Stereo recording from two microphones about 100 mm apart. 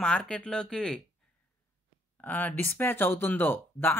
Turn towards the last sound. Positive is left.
turn(degrees=20)  # may be behind; listen again after turning